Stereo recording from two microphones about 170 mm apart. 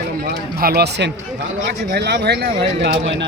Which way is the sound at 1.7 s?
70° right (ahead or behind).